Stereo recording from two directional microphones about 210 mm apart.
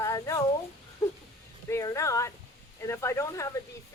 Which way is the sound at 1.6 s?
15° left (ahead or behind).